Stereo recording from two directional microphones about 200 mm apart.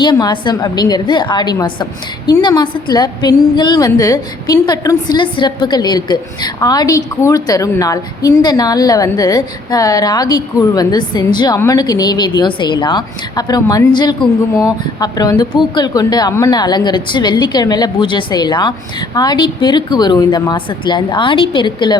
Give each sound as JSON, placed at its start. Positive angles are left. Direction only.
{"t": 0.0, "sound": "a woman's voice", "side_deg": 20}